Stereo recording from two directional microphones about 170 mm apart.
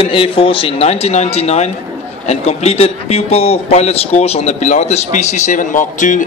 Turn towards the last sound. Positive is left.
turn(degrees=50)  # may be behind; listen again after turning